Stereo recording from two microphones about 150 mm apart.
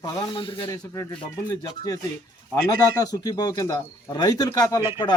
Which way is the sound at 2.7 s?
25° left (ahead or behind).